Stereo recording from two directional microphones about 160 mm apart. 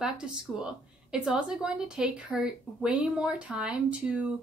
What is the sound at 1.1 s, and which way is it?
A woman's voice, 5° right (ahead or behind).